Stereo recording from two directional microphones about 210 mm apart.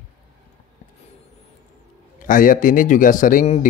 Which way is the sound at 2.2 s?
40° left (ahead or behind).